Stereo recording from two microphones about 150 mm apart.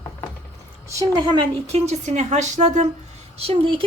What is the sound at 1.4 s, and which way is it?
A woman's voice, 45° right (ahead or behind).